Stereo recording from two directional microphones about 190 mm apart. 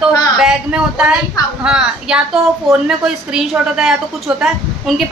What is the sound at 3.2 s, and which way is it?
A woman's voice, 5° right (ahead or behind).